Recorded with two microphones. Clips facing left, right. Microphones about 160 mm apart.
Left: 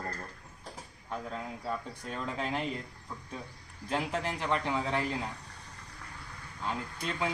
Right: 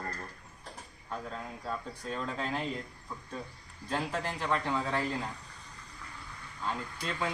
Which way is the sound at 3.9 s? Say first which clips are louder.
Left 1 dB; 15° left (ahead or behind).